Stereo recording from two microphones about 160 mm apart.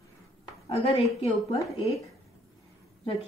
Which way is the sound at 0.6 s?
40° left (ahead or behind).